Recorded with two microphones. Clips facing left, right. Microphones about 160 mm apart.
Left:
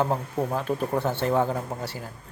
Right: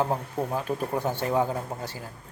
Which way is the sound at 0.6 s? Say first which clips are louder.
Left 2 dB; 10° right (ahead or behind).